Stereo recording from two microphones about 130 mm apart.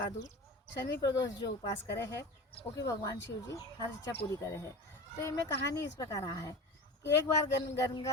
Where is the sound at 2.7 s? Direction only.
25° left (ahead or behind).